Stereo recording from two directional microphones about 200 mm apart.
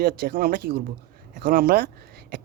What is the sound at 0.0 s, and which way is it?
Speech, 45° right (ahead or behind).